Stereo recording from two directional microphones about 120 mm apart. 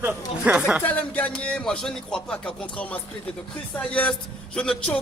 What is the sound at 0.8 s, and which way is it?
Music, 15° left (ahead or behind).